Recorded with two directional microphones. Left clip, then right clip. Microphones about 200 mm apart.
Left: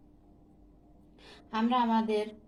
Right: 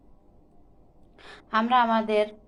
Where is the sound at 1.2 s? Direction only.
20° right (ahead or behind).